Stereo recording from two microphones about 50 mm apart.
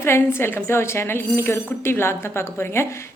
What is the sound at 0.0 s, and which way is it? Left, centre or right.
A woman's voice, left.